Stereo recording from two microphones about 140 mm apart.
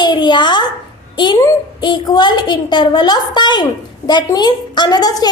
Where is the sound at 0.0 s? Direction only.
30° left (ahead or behind).